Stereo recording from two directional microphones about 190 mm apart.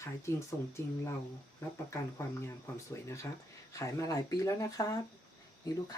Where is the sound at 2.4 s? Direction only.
15° left (ahead or behind).